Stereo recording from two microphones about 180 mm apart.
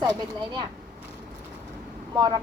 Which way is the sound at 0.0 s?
25° right (ahead or behind).